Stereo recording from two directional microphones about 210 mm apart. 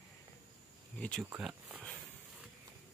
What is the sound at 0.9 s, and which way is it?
Speech, 5° left (ahead or behind).